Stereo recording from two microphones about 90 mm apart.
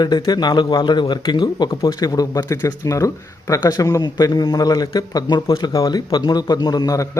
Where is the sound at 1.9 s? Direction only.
45° left (ahead or behind).